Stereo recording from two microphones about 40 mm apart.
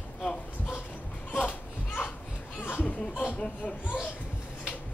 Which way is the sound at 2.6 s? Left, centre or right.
Left.